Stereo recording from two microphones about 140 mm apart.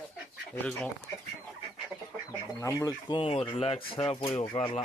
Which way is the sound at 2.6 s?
25° left (ahead or behind).